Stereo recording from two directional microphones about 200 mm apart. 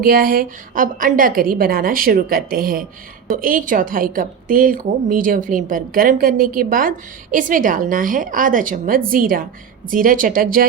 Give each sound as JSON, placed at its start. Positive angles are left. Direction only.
{"t": 0.0, "sound": "a woman's voice", "side_deg": -45}